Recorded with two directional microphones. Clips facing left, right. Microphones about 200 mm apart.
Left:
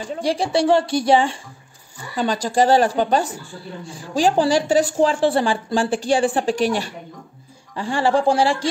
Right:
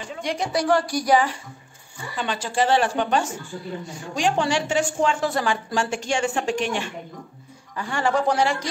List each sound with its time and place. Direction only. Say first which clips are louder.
0.0 s a woman's voice: left 5 dB; 35° left (ahead or behind)
2.1 s a woman's voice: left 6 dB; 40° left (ahead or behind)